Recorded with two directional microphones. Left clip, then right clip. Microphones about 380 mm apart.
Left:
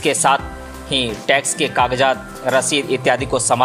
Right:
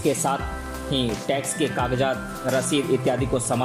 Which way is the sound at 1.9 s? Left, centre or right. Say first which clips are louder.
Left 7 dB; centre.